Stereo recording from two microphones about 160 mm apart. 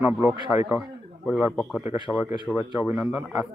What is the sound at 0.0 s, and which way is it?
Speech, 15° right (ahead or behind).